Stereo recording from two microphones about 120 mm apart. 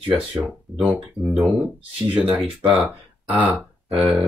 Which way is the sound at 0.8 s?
5° right (ahead or behind).